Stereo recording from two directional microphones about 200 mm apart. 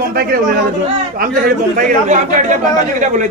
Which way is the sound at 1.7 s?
40° right (ahead or behind).